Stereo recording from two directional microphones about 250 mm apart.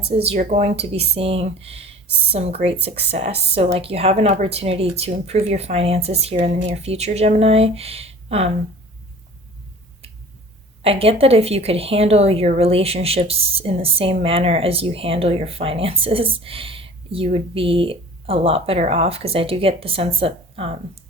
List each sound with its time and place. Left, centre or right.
0.1 s speech: right
10.8 s speech: right